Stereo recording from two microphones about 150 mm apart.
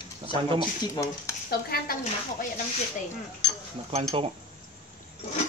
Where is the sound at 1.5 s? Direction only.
90° left.